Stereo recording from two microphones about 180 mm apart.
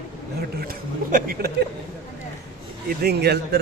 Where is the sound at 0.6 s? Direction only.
55° right (ahead or behind).